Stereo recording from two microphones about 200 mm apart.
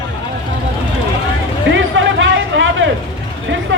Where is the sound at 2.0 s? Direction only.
70° right (ahead or behind).